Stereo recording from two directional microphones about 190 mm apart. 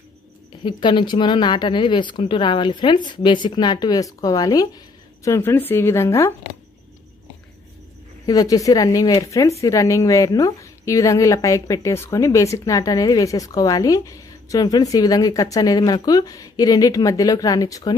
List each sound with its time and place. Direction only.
0.7 s a woman's voice: 25° left (ahead or behind)
8.3 s a woman's voice: 20° left (ahead or behind)